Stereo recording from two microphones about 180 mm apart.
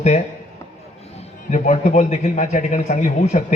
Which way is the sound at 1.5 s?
40° left (ahead or behind).